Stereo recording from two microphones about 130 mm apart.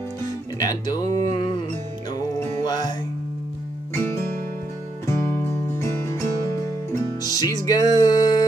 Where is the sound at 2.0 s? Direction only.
30° left (ahead or behind).